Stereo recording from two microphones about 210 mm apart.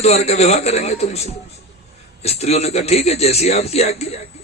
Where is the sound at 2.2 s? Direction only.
30° left (ahead or behind).